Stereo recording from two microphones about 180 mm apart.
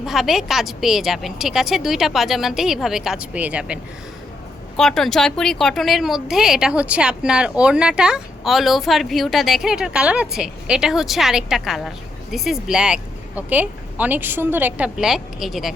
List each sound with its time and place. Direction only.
0.0 s a woman's voice: centre (ahead or behind)
4.8 s a woman's voice: 5° left (ahead or behind)